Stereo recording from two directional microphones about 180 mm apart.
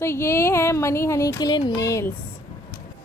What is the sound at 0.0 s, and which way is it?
Speech, 15° left (ahead or behind).